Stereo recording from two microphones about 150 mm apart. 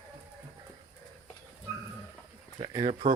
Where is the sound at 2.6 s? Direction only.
30° right (ahead or behind).